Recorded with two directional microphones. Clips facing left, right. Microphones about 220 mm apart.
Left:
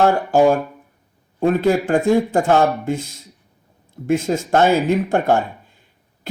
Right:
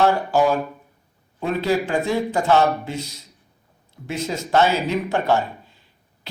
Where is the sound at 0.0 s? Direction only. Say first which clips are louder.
Left 4 dB; 50° left (ahead or behind).